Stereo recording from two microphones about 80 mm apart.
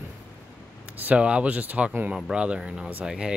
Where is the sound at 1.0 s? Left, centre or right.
Centre.